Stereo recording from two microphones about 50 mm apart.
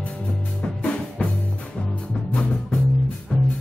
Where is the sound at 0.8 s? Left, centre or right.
Left.